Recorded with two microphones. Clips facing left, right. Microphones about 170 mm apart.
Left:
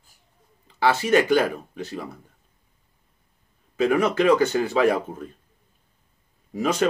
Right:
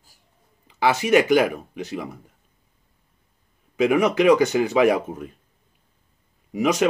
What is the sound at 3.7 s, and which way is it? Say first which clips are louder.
Speech: right 2 dB; 15° right (ahead or behind).